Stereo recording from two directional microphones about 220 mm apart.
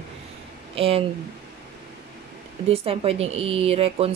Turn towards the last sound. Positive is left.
turn(degrees=-25)  # may be behind; listen again after turning